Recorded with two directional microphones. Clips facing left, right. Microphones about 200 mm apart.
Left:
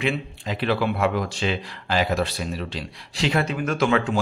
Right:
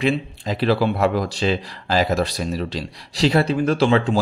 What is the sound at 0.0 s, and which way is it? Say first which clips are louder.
Speech: right 5 dB; 35° right (ahead or behind).